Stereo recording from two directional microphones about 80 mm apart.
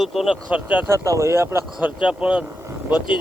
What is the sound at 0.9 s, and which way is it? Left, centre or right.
Speech, right.